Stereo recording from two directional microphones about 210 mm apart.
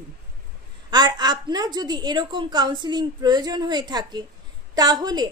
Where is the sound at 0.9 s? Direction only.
20° right (ahead or behind).